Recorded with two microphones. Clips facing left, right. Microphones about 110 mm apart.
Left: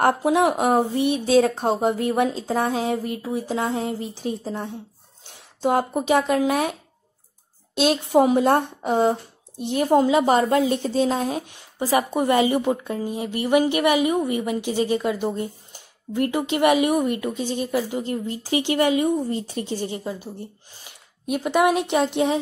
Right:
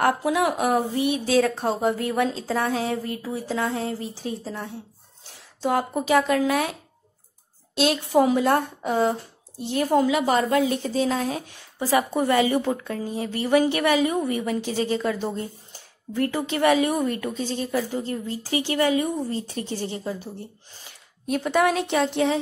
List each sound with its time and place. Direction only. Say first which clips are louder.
0.0 s speech: left 3 dB; 25° left (ahead or behind)
5.7 s a woman's voice: left 2 dB; 20° left (ahead or behind)